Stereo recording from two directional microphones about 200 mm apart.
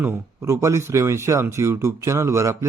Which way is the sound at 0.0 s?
10° right (ahead or behind).